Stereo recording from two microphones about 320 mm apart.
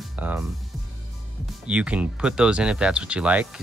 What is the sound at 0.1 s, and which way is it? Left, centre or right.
Music, centre.